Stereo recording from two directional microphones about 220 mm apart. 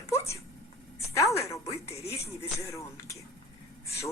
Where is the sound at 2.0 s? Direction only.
30° left (ahead or behind).